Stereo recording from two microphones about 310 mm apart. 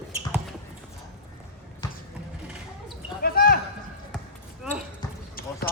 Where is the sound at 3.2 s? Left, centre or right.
Left.